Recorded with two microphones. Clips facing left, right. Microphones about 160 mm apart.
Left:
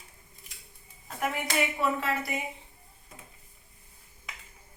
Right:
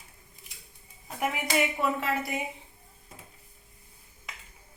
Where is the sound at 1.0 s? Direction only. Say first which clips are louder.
Right 1 dB; 10° right (ahead or behind).